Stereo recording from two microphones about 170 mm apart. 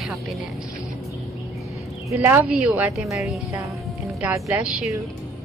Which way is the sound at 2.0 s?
15° right (ahead or behind).